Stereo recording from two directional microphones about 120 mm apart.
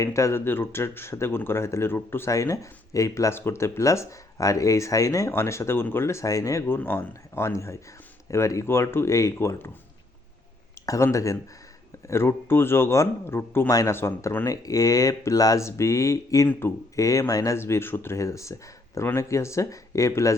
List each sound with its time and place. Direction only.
0.0 s speech: 25° left (ahead or behind)
10.8 s speech: 25° left (ahead or behind)